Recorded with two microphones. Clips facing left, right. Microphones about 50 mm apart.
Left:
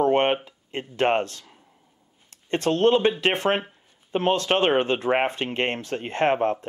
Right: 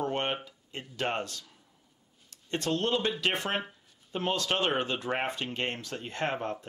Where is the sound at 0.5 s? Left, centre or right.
Left.